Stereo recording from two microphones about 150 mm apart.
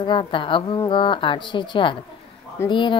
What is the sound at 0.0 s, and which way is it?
Music, 35° left (ahead or behind).